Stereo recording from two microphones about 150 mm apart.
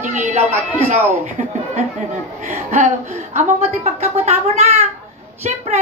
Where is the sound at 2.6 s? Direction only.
55° right (ahead or behind).